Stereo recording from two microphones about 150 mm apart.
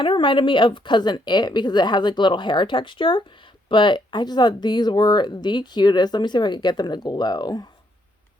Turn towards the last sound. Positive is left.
turn(degrees=25)  # may be behind; listen again after turning